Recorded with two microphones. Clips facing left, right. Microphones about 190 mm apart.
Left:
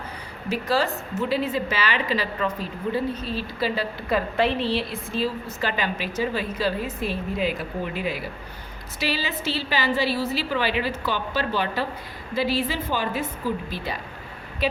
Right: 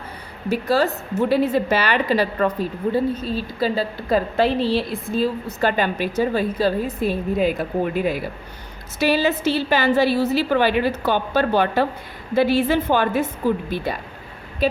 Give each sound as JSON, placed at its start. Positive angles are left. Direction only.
{"t": 0.4, "sound": "a woman's voice", "side_deg": -55}
{"t": 2.8, "sound": "a woman's voice", "side_deg": -45}
{"t": 5.5, "sound": "a woman's voice", "side_deg": -50}